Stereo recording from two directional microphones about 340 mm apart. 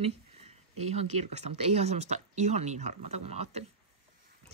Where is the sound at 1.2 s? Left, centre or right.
Centre.